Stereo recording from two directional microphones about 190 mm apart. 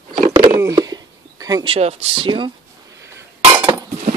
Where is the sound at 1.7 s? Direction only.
30° right (ahead or behind).